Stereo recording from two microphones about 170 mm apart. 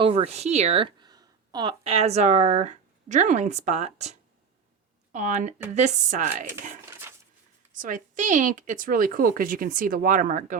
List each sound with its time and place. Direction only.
0.0 s speech: 35° right (ahead or behind)
7.7 s speech: 50° right (ahead or behind)